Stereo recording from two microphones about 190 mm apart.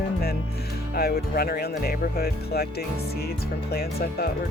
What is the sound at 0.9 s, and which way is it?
Speech, 55° left (ahead or behind).